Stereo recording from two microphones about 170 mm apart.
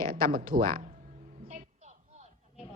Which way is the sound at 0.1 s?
60° right (ahead or behind).